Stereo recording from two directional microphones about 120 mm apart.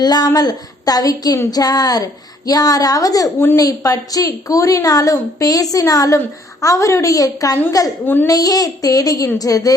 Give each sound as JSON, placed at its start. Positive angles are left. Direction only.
{"t": 0.0, "sound": "a woman's voice", "side_deg": 35}
{"t": 8.0, "sound": "a child's voice", "side_deg": 15}
{"t": 8.3, "sound": "a woman's voice", "side_deg": 30}